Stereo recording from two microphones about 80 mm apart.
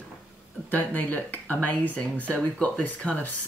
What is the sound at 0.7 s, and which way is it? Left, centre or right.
Speech, left.